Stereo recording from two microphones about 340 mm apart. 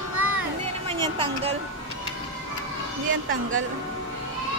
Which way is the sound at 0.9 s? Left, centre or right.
Centre.